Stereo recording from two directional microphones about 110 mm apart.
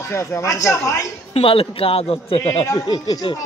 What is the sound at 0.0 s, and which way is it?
Speech, 30° left (ahead or behind).